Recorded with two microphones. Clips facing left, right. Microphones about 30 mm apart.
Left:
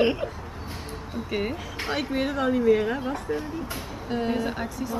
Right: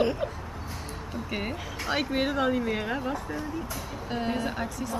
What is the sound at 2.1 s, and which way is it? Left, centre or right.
A woman's voice, centre.